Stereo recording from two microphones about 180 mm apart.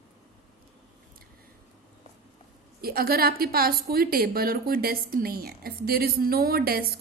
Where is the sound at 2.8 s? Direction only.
55° right (ahead or behind).